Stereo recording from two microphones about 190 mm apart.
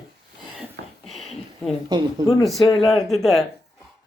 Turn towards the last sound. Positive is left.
turn(degrees=0)  # may be behind; listen again after turning